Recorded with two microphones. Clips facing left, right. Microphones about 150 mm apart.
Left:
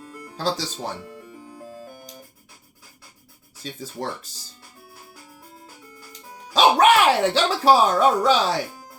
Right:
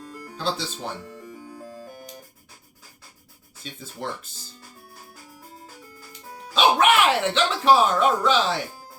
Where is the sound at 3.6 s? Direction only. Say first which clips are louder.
Left 4 dB; 35° left (ahead or behind).